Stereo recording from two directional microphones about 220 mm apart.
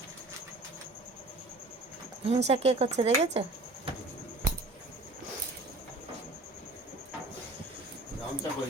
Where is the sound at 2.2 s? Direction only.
30° right (ahead or behind).